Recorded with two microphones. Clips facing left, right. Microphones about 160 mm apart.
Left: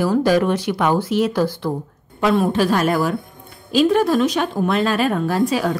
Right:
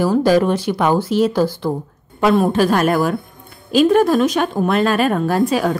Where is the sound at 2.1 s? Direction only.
45° right (ahead or behind).